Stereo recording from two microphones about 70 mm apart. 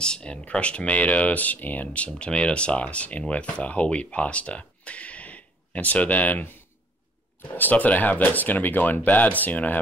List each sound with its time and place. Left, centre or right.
0.0 s speech: centre
7.5 s speech: left